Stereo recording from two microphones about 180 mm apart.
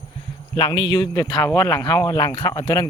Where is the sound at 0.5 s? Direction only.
25° left (ahead or behind).